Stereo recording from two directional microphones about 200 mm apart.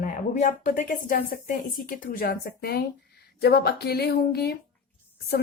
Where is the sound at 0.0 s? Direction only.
40° left (ahead or behind).